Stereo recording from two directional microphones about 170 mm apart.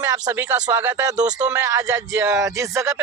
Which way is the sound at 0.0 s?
20° right (ahead or behind).